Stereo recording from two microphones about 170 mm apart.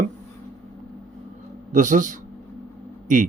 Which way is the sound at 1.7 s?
50° right (ahead or behind).